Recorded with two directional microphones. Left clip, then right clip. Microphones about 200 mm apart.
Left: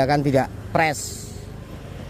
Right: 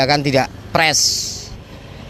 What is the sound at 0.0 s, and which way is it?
Speech, 10° left (ahead or behind).